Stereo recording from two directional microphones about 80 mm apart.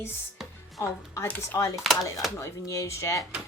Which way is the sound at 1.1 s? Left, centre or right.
Left.